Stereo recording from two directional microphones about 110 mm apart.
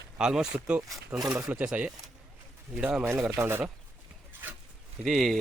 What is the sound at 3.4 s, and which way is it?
Speech, 20° right (ahead or behind).